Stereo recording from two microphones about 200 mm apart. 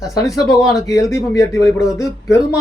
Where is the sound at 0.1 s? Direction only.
20° left (ahead or behind).